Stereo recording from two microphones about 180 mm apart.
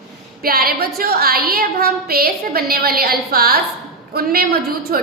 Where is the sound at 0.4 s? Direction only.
55° right (ahead or behind).